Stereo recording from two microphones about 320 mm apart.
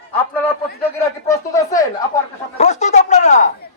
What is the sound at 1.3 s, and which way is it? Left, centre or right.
Speech, centre.